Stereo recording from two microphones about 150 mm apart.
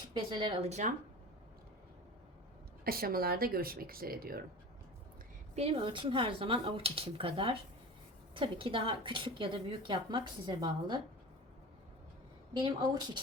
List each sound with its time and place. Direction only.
0.1 s a woman's voice: 30° right (ahead or behind); by 0.9 s 50° right (ahead or behind)
2.8 s speech: 80° right
5.5 s a woman's voice: 40° right (ahead or behind)
12.5 s a woman's voice: 30° right (ahead or behind)